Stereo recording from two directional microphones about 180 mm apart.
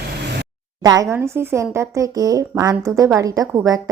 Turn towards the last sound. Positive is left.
turn(degrees=-15)  # may be behind; listen again after turning